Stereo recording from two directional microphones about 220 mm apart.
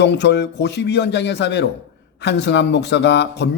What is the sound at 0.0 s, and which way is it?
A man's voice, 50° left (ahead or behind).